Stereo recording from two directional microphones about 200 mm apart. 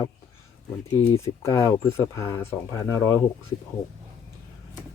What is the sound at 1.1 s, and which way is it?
Speech, 15° left (ahead or behind).